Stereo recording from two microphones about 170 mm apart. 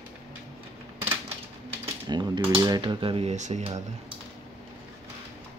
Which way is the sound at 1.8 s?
25° right (ahead or behind).